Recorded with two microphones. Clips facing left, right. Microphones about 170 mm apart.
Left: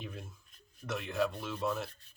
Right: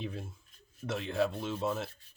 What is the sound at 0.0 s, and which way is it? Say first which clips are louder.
Speech: right 5 dB; 30° right (ahead or behind).